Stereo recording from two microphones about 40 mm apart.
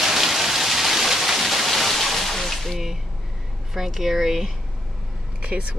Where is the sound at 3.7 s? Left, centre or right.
Centre.